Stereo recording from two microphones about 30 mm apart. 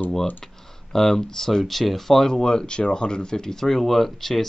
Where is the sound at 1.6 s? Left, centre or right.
Centre.